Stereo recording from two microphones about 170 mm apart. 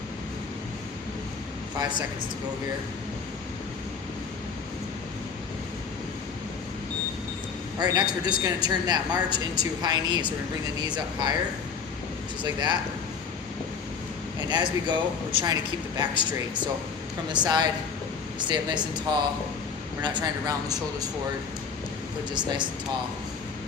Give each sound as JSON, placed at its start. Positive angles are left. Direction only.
{"t": 1.8, "sound": "a woman's voice", "side_deg": -25}
{"t": 7.8, "sound": "a woman's voice", "side_deg": -25}
{"t": 12.4, "sound": "a woman's voice", "side_deg": -25}
{"t": 14.5, "sound": "a woman's voice", "side_deg": -25}
{"t": 22.3, "sound": "a woman's voice", "side_deg": -25}